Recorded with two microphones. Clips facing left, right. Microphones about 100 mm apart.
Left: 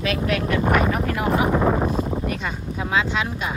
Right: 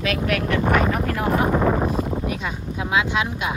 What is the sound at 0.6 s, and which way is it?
Speech, 5° left (ahead or behind).